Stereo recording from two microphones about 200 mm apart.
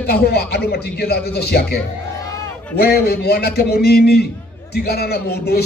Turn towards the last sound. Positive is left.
turn(degrees=55)  # may be behind; listen again after turning